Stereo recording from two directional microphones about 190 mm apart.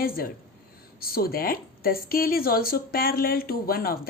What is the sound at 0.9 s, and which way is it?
A woman's voice, 55° left (ahead or behind).